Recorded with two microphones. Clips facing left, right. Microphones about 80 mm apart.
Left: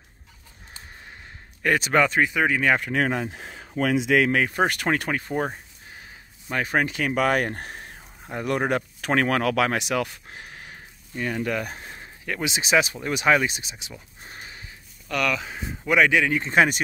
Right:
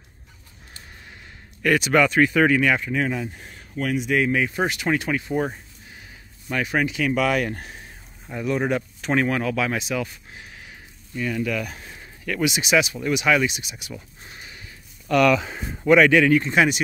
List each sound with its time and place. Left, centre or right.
1.6 s a man's voice: left
2.8 s speech: left
4.4 s speech: left
6.5 s speech: left
10.3 s speech: left
14.3 s a sound: left
15.0 s speech: centre
16.0 s speech: centre
16.4 s speech: left